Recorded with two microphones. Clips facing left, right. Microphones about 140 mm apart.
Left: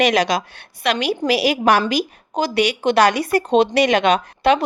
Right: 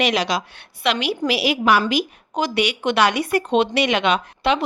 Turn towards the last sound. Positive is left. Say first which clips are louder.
# left 4 dB
turn(degrees=45)  # may be behind; listen again after turning